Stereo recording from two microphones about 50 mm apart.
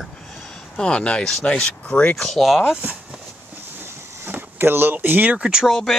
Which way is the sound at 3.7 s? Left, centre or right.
Right.